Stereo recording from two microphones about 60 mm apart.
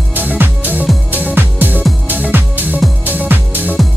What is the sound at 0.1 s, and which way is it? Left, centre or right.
Music, right.